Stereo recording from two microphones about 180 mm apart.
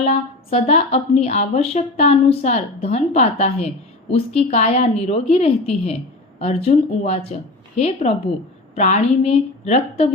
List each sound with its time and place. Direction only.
0.0 s a woman's voice: 35° left (ahead or behind)